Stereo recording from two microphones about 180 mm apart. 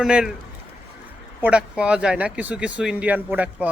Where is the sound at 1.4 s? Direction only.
5° right (ahead or behind).